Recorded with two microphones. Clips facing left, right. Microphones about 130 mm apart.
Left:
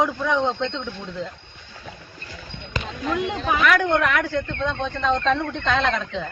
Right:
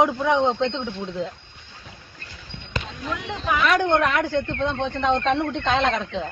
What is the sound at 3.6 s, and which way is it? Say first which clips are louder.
Speech: even; 25° right (ahead or behind).